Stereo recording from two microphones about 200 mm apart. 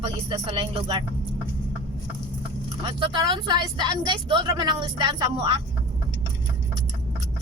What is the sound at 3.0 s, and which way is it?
A woman's voice, 25° right (ahead or behind).